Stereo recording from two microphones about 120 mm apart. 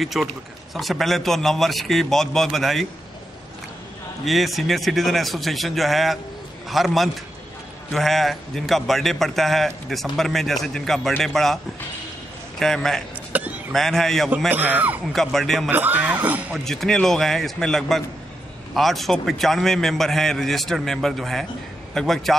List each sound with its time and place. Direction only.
0.0 s a man's voice: centre (ahead or behind)
4.2 s a man's voice: centre (ahead or behind)
13.3 s a sound: 15° right (ahead or behind)
13.7 s a man's voice: 5° left (ahead or behind)
14.5 s speech: 15° right (ahead or behind)
15.1 s a man's voice: centre (ahead or behind)
15.7 s speech: 15° right (ahead or behind)
16.5 s a man's voice: 5° left (ahead or behind)